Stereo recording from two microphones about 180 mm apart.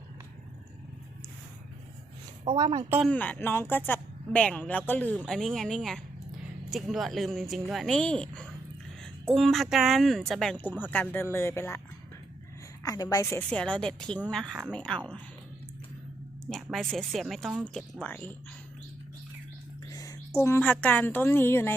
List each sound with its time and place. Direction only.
2.4 s a woman's voice: 30° right (ahead or behind)
3.1 s a woman's voice: 10° left (ahead or behind)
12.8 s a woman's voice: 20° left (ahead or behind)
13.5 s a woman's voice: 5° left (ahead or behind)
16.9 s a woman's voice: centre (ahead or behind)
19.9 s a woman's voice: 20° left (ahead or behind)